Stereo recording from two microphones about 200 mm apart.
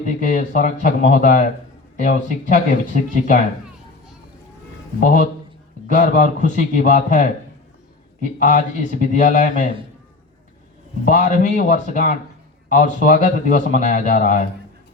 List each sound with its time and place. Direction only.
0.0 s a man's voice: 35° left (ahead or behind)
4.9 s a man's voice: 40° left (ahead or behind)
8.4 s a man's voice: 35° left (ahead or behind)
11.0 s a man's voice: 40° left (ahead or behind)